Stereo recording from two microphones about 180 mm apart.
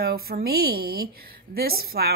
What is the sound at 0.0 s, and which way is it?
A woman's voice, 60° right (ahead or behind).